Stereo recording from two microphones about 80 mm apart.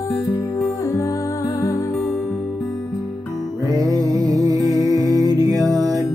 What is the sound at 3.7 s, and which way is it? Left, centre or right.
Music, right.